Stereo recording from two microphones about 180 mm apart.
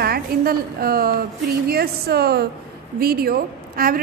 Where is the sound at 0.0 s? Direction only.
55° right (ahead or behind).